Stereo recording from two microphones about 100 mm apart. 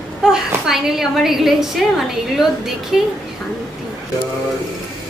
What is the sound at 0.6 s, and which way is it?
A woman's voice, 5° right (ahead or behind).